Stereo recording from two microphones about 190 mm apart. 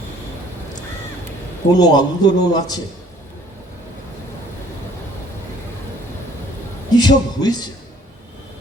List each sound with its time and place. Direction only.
1.7 s a man's voice: 20° left (ahead or behind)
6.9 s a man's voice: 20° left (ahead or behind)